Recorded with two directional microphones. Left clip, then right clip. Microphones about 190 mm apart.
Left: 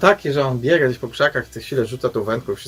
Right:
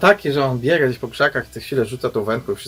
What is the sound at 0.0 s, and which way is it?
Speech, 5° left (ahead or behind).